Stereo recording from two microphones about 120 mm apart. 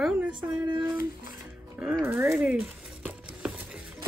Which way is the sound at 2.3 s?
10° right (ahead or behind).